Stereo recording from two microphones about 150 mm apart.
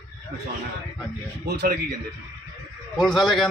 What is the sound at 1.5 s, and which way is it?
Speech, 90° right.